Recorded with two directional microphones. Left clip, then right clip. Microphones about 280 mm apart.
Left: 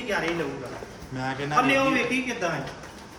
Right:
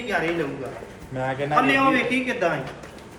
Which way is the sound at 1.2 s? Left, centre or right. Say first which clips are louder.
Right 3 dB; centre.